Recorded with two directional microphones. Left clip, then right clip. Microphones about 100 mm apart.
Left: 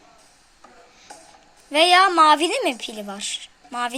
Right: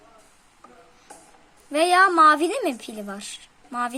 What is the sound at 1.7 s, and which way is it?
A woman's voice, 45° right (ahead or behind).